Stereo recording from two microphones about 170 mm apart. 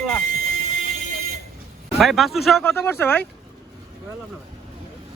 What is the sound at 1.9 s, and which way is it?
Speech, centre (ahead or behind).